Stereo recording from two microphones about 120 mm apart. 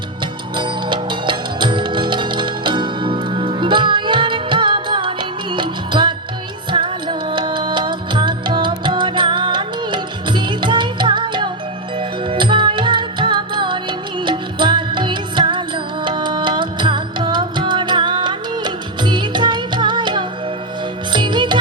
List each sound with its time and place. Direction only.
0.5 s music: 40° right (ahead or behind)